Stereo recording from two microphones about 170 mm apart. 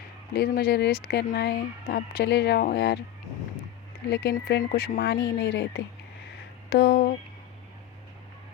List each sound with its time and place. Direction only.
0.3 s speech: 65° left (ahead or behind)
4.1 s speech: 75° left (ahead or behind)